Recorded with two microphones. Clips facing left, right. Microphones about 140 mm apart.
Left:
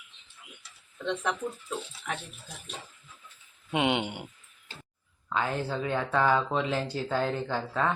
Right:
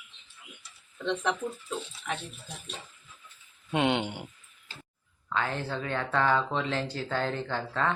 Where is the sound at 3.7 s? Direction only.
10° left (ahead or behind).